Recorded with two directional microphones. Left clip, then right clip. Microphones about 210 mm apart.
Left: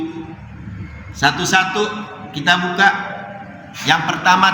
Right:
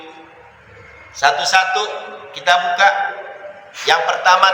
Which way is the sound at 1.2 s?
10° left (ahead or behind).